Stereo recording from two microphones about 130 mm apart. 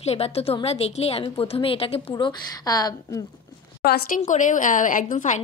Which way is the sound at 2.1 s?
30° left (ahead or behind).